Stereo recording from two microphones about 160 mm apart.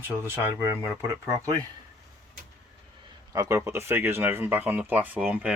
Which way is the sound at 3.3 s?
20° right (ahead or behind).